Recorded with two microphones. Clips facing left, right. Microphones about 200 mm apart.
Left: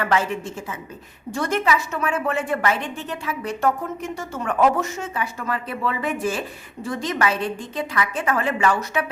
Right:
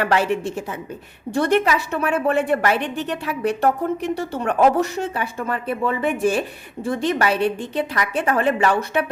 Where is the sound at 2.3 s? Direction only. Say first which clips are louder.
Right 4 dB; 60° right (ahead or behind).